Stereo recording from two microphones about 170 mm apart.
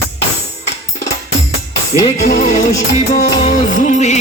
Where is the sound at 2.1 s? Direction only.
45° left (ahead or behind).